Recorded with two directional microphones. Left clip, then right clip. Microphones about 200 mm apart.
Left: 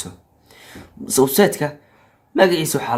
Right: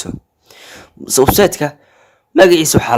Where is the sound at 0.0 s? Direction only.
45° right (ahead or behind).